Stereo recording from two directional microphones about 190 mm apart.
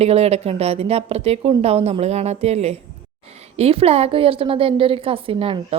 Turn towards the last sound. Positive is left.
turn(degrees=-30)  # may be behind; listen again after turning